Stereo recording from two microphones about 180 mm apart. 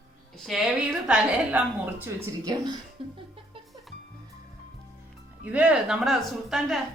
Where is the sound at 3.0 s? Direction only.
30° right (ahead or behind).